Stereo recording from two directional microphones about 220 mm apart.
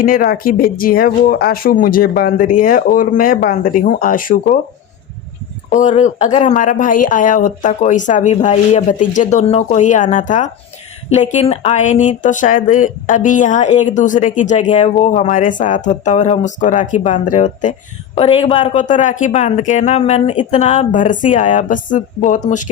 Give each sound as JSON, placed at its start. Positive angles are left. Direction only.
{"t": 0.0, "sound": "speech", "side_deg": 40}
{"t": 5.7, "sound": "speech", "side_deg": 35}